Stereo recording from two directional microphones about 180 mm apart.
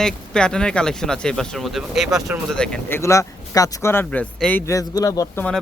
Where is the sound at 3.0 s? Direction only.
15° left (ahead or behind).